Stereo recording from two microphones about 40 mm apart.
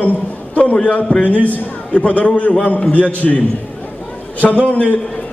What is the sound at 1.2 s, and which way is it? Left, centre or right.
A man's voice, left.